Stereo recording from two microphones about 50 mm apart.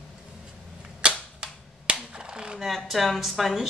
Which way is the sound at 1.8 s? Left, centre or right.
Centre.